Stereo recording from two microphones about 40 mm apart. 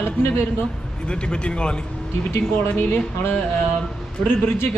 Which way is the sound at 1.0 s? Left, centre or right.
Left.